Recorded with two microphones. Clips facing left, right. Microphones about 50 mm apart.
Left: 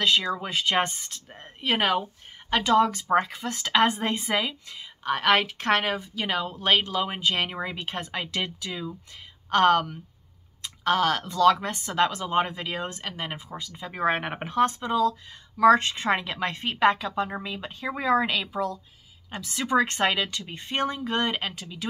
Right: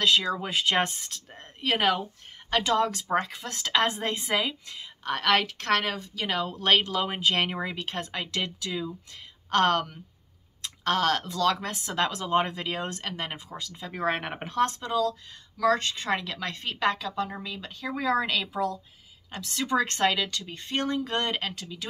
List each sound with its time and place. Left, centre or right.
0.0 s speech: centre
5.2 s speech: centre
7.7 s a woman's voice: centre